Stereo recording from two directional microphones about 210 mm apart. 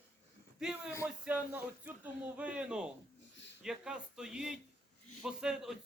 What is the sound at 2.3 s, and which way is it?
Speech, 5° right (ahead or behind).